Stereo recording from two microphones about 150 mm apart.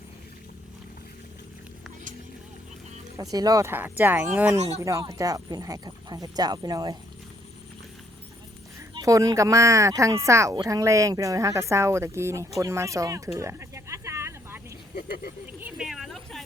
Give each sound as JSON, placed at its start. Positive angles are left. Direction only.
{"t": 3.2, "sound": "speech", "side_deg": -25}
{"t": 4.5, "sound": "speech", "side_deg": -45}
{"t": 4.8, "sound": "speech", "side_deg": -20}
{"t": 9.0, "sound": "speech", "side_deg": -25}
{"t": 12.5, "sound": "a sound", "side_deg": -20}
{"t": 14.9, "sound": "a sound", "side_deg": 90}
{"t": 15.6, "sound": "a woman's voice", "side_deg": -5}